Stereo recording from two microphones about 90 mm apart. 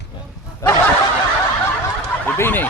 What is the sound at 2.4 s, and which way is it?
Speech, 25° left (ahead or behind).